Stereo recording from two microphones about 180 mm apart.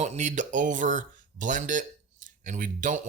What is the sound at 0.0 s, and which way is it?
Speech, 40° right (ahead or behind).